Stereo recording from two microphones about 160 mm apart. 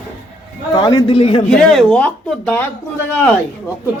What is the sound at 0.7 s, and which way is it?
Speech, 30° left (ahead or behind).